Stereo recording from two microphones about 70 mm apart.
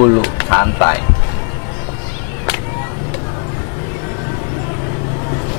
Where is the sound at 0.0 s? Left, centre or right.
Left.